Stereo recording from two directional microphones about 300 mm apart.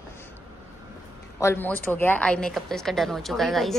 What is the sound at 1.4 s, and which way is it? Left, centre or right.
A woman's voice, centre.